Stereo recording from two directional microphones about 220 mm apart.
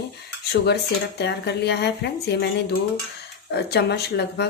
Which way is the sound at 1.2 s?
50° left (ahead or behind).